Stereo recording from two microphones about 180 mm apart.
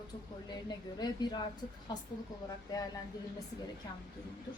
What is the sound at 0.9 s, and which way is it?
Speech, 25° left (ahead or behind).